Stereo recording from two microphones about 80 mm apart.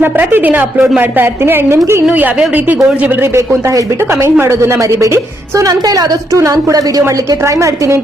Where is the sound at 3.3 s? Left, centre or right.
Right.